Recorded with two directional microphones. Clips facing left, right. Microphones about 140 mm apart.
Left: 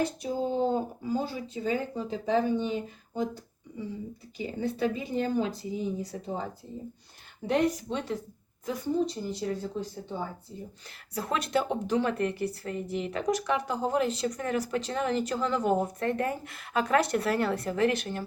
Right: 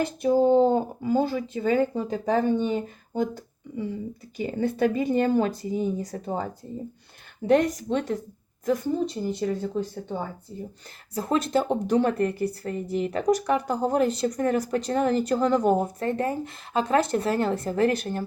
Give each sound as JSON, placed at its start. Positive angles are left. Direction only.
{"t": 0.2, "sound": "speech", "side_deg": -65}
{"t": 9.2, "sound": "speech", "side_deg": -55}
{"t": 11.1, "sound": "a woman's voice", "side_deg": -35}